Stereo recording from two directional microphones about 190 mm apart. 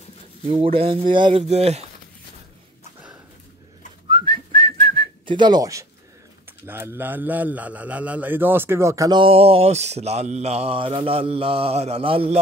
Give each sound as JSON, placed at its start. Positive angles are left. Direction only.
{"t": 0.7, "sound": "a man's voice", "side_deg": -25}
{"t": 4.1, "sound": "whistling", "side_deg": -25}
{"t": 6.6, "sound": "a man's voice", "side_deg": -10}